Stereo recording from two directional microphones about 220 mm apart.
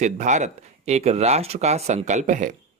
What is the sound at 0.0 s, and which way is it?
Speech, 35° right (ahead or behind).